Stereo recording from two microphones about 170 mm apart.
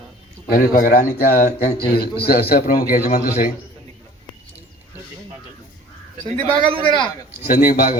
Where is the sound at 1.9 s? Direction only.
65° left (ahead or behind).